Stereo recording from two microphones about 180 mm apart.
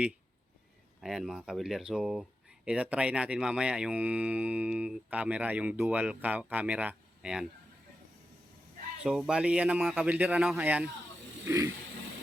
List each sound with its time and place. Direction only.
1.0 s speech: centre (ahead or behind)
9.0 s speech: 5° right (ahead or behind)